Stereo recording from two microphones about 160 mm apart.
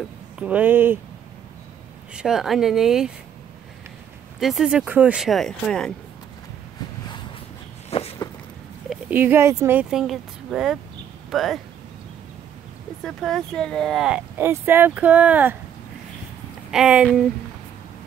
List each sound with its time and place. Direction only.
0.4 s speech: 10° right (ahead or behind)
2.1 s speech: 5° right (ahead or behind)
4.4 s speech: centre (ahead or behind)
7.9 s a sound: 40° left (ahead or behind)
9.1 s speech: 15° right (ahead or behind)
9.8 s speech: 5° right (ahead or behind)
13.0 s speech: 5° left (ahead or behind)
16.7 s speech: 5° right (ahead or behind)